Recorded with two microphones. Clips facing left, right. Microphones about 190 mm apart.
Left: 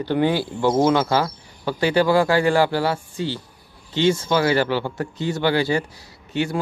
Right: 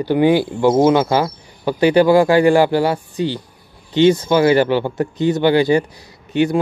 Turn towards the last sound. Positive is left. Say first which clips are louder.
# right 7 dB
turn(degrees=-20)  # may be behind; listen again after turning